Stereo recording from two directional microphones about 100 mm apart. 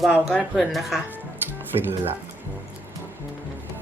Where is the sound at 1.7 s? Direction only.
50° right (ahead or behind).